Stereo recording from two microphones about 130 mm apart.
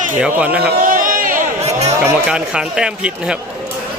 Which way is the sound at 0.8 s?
90° right.